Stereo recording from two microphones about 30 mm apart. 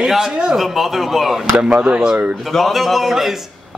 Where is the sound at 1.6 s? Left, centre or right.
Right.